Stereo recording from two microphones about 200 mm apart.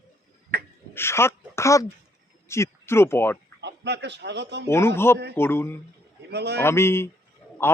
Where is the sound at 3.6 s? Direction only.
60° right (ahead or behind).